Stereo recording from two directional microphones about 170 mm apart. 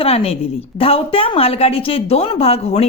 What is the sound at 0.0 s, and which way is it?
A woman's voice, 35° left (ahead or behind).